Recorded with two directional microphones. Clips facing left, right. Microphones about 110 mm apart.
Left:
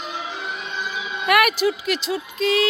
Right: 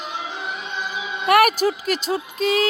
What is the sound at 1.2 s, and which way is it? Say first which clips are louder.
Speech: right 2 dB; 35° right (ahead or behind).